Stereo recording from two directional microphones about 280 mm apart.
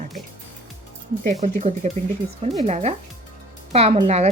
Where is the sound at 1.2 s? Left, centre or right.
Right.